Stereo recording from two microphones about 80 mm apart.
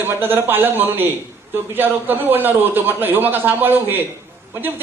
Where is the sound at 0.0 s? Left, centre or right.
Right.